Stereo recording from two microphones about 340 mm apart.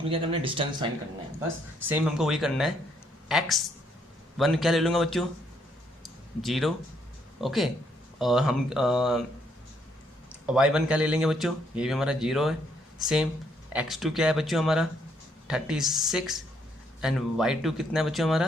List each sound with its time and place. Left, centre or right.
0.1 s speech: centre
1.9 s speech: centre
6.0 s a sound: centre
7.4 s speech: centre
10.4 s speech: centre